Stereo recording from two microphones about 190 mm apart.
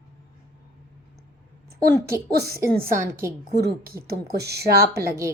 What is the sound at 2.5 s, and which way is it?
A woman's voice, 50° right (ahead or behind).